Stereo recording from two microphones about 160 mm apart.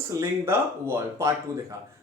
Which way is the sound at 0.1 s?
15° right (ahead or behind).